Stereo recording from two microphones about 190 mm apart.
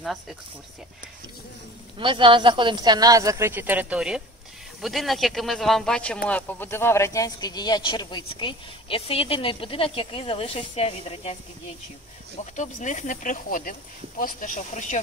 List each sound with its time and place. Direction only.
2.0 s speech: 25° right (ahead or behind); by 11.3 s 30° left (ahead or behind)
12.5 s speech: 40° left (ahead or behind)